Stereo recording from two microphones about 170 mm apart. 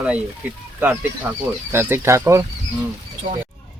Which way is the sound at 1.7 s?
15° right (ahead or behind).